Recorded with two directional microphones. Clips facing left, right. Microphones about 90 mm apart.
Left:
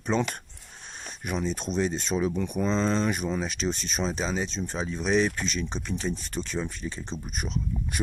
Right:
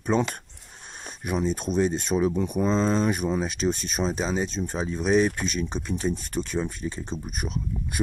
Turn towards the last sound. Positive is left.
turn(degrees=-15)  # may be behind; listen again after turning